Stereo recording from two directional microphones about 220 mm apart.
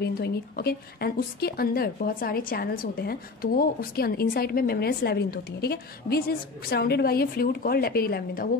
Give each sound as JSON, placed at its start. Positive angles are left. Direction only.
{"t": 0.0, "sound": "a woman's voice", "side_deg": 45}